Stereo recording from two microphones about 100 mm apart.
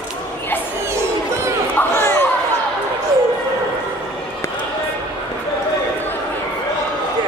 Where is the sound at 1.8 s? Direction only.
25° left (ahead or behind).